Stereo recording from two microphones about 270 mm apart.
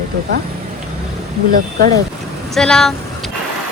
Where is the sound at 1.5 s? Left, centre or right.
Right.